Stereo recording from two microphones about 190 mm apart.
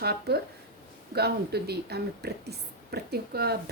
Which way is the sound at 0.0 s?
60° right (ahead or behind).